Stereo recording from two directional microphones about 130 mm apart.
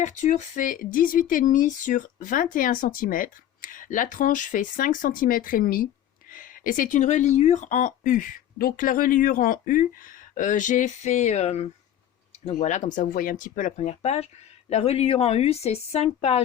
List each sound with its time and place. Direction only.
0.0 s speech: 70° left (ahead or behind); by 11.7 s 55° left (ahead or behind)
12.5 s a woman's voice: 65° left (ahead or behind)